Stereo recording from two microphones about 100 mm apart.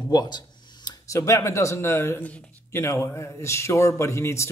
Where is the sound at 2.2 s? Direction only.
15° left (ahead or behind).